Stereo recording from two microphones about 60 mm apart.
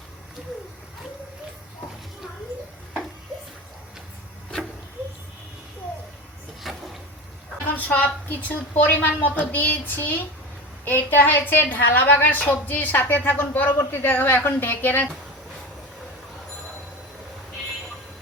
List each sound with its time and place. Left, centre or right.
6.6 s water: centre
7.8 s a woman's voice: left